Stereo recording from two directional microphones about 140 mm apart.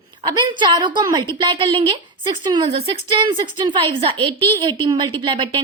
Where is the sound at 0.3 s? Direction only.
35° right (ahead or behind).